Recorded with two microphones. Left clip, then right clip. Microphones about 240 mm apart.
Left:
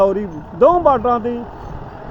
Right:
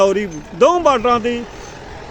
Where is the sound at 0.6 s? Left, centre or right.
Right.